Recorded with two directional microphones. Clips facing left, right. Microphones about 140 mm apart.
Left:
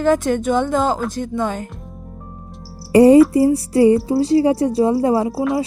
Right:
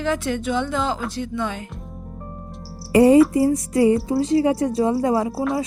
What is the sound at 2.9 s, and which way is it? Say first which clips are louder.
A woman's voice: left 4 dB; 35° left (ahead or behind).